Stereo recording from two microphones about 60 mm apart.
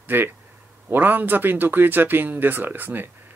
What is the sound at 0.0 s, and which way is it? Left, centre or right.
Speech, right.